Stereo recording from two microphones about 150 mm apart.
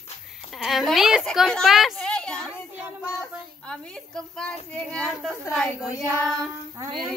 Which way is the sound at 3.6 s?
5° left (ahead or behind).